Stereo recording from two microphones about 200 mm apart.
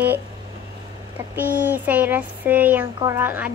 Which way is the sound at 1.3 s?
10° right (ahead or behind).